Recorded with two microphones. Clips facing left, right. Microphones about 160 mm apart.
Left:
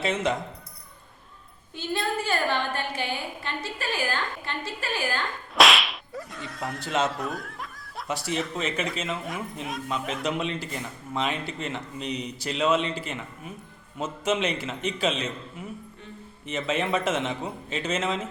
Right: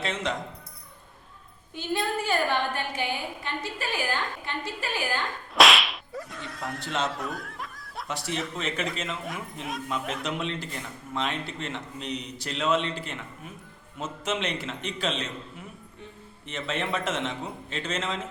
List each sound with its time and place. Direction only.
0.0 s speech: 5° left (ahead or behind)
1.7 s a woman's voice: 15° right (ahead or behind)
5.5 s whip: centre (ahead or behind)
16.5 s whip: 5° left (ahead or behind)